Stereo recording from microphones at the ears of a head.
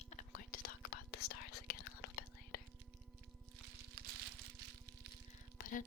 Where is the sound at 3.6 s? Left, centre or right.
Right.